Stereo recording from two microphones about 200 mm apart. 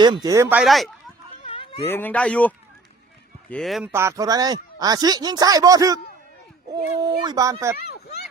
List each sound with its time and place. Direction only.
0.0 s speech: 20° right (ahead or behind)
0.6 s speech: centre (ahead or behind)
1.5 s a sound: 30° left (ahead or behind)
1.9 s a man's voice: 10° left (ahead or behind)
3.9 s speech: 15° right (ahead or behind)